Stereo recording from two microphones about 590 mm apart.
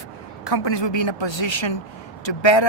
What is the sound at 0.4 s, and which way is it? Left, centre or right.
Speech, left.